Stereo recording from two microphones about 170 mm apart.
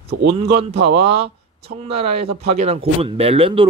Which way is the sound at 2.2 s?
35° right (ahead or behind).